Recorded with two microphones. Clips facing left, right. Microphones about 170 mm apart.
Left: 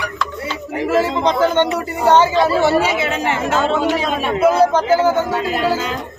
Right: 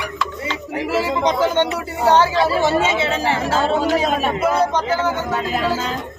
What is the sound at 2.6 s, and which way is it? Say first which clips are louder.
Speech: left 2 dB; 20° right (ahead or behind).